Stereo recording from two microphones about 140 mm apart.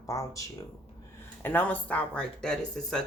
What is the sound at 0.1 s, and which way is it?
Speech, 25° left (ahead or behind).